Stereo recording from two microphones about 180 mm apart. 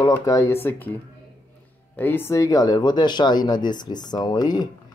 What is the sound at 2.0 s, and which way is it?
Speech, 10° left (ahead or behind).